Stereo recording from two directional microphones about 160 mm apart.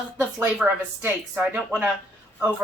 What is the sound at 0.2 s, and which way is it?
Speech, 10° right (ahead or behind).